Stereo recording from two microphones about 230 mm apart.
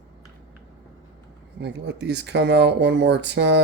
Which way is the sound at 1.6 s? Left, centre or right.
Right.